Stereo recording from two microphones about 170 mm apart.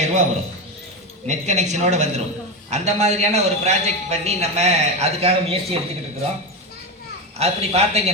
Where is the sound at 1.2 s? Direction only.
45° right (ahead or behind).